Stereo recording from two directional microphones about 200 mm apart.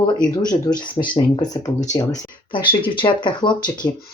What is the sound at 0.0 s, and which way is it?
Speech, 20° left (ahead or behind).